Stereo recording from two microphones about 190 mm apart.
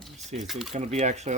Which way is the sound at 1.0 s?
40° right (ahead or behind).